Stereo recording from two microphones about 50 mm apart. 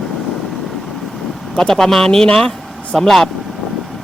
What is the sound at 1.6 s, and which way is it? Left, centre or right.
Speech, centre.